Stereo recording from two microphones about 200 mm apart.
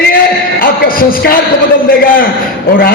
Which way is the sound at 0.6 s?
45° left (ahead or behind).